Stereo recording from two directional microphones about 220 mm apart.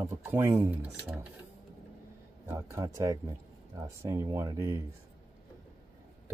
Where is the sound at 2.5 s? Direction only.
15° right (ahead or behind).